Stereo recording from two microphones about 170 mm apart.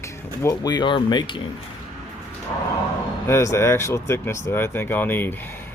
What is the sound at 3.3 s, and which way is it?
Speech, 15° left (ahead or behind).